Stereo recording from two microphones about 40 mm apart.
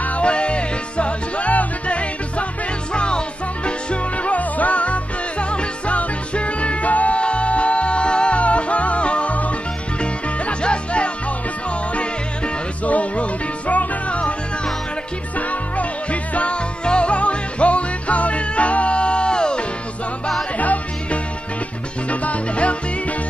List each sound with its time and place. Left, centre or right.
0.0 s music: left
9.9 s music: left
12.8 s music: left
15.3 s music: left
20.5 s music: left